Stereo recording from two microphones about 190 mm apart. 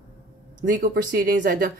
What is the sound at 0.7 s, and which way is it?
A woman's voice, 60° right (ahead or behind).